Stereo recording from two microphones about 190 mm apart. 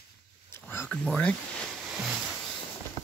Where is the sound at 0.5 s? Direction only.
15° left (ahead or behind).